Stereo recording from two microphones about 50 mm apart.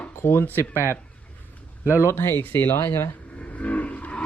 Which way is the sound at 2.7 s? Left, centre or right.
Left.